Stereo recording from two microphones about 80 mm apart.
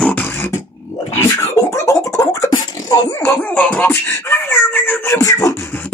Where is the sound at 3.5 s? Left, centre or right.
Centre.